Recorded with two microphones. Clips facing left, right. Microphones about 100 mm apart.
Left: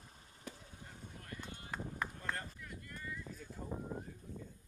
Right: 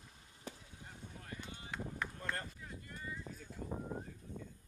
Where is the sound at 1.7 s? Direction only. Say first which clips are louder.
Left 1 dB; 40° left (ahead or behind).